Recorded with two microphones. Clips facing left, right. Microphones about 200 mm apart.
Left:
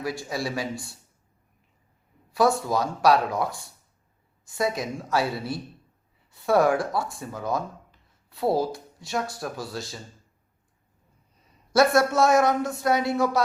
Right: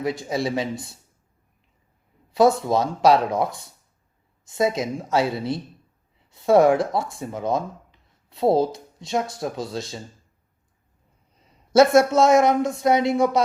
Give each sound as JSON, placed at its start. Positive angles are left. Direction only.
{"t": 0.0, "sound": "speech", "side_deg": -20}
{"t": 2.3, "sound": "speech", "side_deg": -20}
{"t": 11.9, "sound": "speech", "side_deg": -20}